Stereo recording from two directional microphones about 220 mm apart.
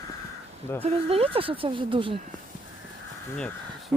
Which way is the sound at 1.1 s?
25° right (ahead or behind).